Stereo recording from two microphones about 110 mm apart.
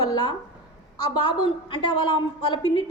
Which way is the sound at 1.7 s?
45° left (ahead or behind).